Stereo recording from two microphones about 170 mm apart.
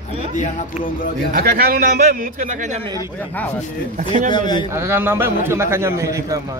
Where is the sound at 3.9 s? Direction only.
50° right (ahead or behind).